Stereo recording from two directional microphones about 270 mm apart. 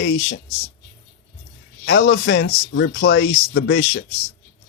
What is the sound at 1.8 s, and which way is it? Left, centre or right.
Speech, left.